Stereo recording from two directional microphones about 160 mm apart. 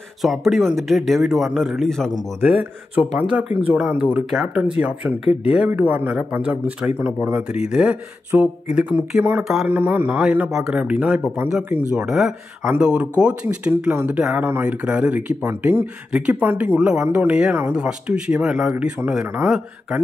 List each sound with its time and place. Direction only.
0.2 s speech: centre (ahead or behind)
3.1 s speech: 5° right (ahead or behind)